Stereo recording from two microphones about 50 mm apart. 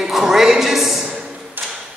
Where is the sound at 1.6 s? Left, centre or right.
Right.